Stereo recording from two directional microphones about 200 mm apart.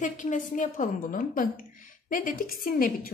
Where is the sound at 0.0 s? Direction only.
40° left (ahead or behind).